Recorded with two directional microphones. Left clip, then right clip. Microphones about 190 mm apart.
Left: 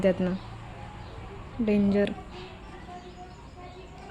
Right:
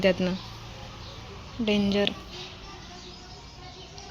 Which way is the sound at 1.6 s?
5° left (ahead or behind).